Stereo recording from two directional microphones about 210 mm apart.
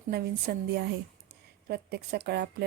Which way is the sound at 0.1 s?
50° right (ahead or behind).